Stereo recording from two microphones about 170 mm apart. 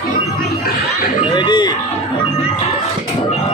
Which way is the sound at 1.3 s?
25° left (ahead or behind).